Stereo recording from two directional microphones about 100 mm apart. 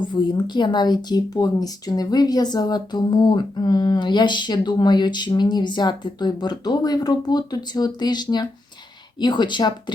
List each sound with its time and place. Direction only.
0.1 s speech: 45° left (ahead or behind)